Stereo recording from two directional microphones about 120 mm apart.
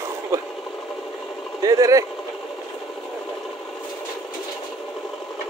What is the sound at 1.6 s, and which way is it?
Speech, 30° right (ahead or behind).